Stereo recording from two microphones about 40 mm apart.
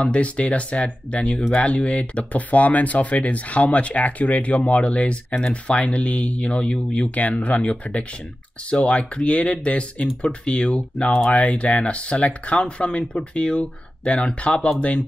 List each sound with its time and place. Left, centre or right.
0.0 s speech: left